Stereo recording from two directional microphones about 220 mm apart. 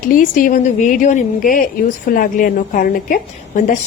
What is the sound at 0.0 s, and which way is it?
A woman's voice, 40° left (ahead or behind).